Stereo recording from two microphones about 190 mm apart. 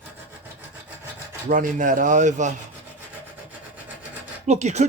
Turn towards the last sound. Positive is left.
turn(degrees=-35)  # may be behind; listen again after turning